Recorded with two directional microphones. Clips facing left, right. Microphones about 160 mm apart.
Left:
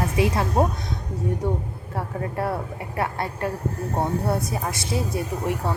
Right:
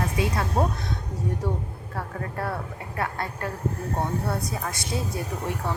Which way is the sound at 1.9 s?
25° left (ahead or behind).